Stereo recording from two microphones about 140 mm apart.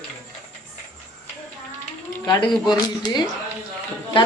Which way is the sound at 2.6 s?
30° left (ahead or behind).